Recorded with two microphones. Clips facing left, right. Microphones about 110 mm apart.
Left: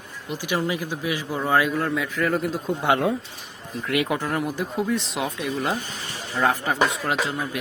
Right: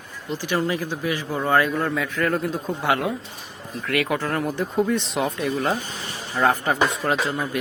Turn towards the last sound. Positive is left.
turn(degrees=0)  # may be behind; listen again after turning